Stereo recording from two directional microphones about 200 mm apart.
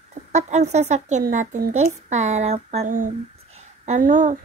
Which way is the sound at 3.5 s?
35° right (ahead or behind).